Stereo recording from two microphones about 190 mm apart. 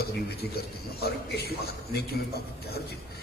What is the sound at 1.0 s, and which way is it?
A man's voice, 55° left (ahead or behind).